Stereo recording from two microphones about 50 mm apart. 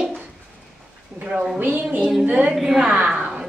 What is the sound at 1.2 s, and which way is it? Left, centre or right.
Speech, right.